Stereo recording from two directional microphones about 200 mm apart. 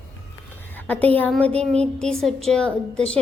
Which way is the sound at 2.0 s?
Centre (ahead or behind).